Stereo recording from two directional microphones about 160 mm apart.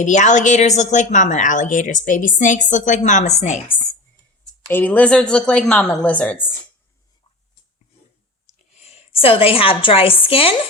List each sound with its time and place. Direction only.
0.0 s a woman's voice: 50° left (ahead or behind)
4.7 s speech: 10° left (ahead or behind)
8.7 s a woman's voice: 40° left (ahead or behind)